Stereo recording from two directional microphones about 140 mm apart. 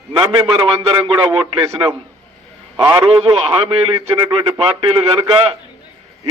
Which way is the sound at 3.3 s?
40° right (ahead or behind).